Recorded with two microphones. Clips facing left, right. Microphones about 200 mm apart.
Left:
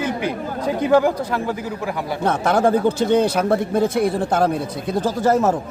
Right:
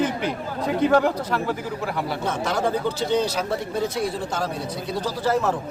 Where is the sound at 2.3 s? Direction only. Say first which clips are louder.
Left 8 dB; 55° left (ahead or behind).